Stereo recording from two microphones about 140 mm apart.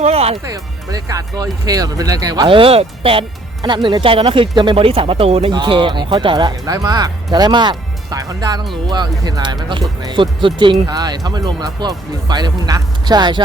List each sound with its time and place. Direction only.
0.0 s music: 45° right (ahead or behind)
0.4 s speech: 25° right (ahead or behind); by 5.5 s 45° right (ahead or behind)
5.5 s speech: 35° right (ahead or behind)